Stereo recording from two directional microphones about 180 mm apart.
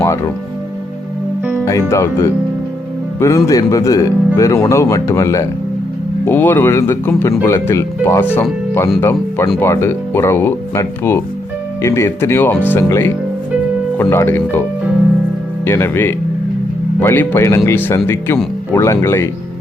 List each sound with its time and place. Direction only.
1.6 s speech: 15° left (ahead or behind)
15.6 s speech: 10° left (ahead or behind)